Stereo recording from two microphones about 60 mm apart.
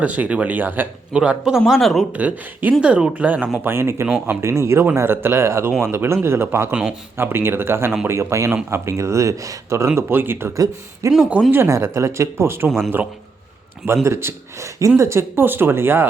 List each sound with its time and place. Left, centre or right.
0.0 s speech: right
1.1 s a man's voice: centre
2.1 s speech: right
2.8 s a man's voice: centre
3.6 s speech: right
4.9 s speech: right
11.0 s a woman's voice: right
13.8 s speech: right
14.8 s a woman's voice: right
15.4 s speech: right